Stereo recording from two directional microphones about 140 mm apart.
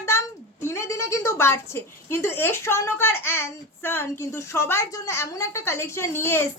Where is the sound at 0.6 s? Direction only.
20° left (ahead or behind).